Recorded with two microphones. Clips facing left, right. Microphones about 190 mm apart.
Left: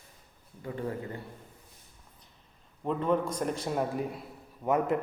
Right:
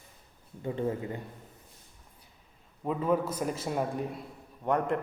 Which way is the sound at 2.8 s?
5° right (ahead or behind).